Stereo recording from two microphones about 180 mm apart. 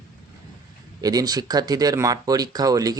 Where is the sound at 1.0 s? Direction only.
20° right (ahead or behind).